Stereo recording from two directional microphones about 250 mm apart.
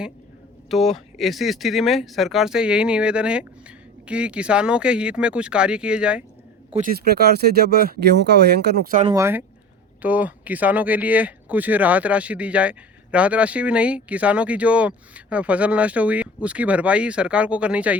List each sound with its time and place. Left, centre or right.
0.7 s speech: centre
6.7 s speech: right
9.0 s speech: centre